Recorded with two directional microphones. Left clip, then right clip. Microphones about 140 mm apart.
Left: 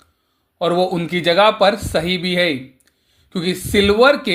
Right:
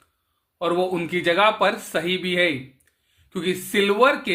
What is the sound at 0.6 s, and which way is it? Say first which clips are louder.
Speech: left 5 dB; 40° left (ahead or behind).